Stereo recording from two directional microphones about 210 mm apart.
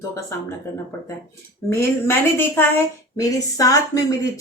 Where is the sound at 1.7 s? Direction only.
10° left (ahead or behind).